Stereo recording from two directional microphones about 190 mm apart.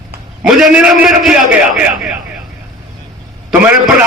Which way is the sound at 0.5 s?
5° right (ahead or behind).